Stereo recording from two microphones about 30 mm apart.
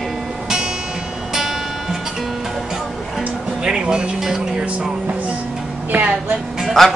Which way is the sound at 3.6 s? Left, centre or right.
Right.